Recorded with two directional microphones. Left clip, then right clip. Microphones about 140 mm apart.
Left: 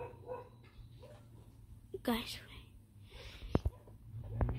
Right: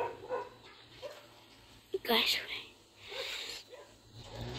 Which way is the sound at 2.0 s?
5° right (ahead or behind).